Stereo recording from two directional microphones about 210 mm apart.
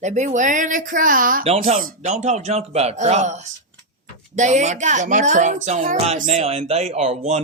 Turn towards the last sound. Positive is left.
turn(degrees=-30)  # may be behind; listen again after turning